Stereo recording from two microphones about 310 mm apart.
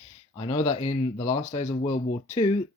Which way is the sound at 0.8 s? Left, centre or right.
Left.